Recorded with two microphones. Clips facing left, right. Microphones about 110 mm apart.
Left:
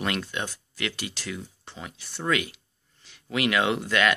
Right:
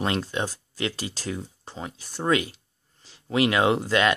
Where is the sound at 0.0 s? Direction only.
30° right (ahead or behind).